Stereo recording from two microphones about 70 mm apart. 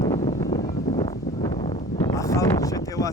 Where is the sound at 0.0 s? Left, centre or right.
Left.